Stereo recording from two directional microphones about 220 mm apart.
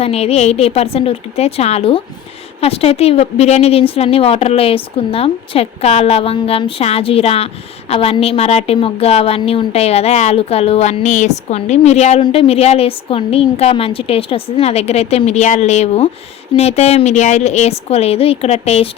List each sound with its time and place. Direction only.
0.0 s a woman's voice: 25° left (ahead or behind)